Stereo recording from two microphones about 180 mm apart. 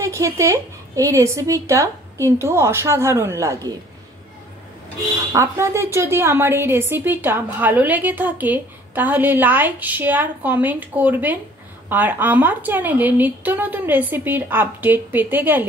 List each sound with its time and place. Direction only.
0.0 s a woman's voice: 15° right (ahead or behind)
5.3 s a woman's voice: 15° right (ahead or behind)